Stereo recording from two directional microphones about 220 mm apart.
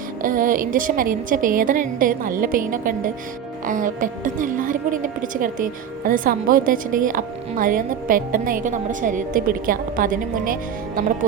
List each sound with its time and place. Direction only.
0.2 s a woman's voice: 35° right (ahead or behind)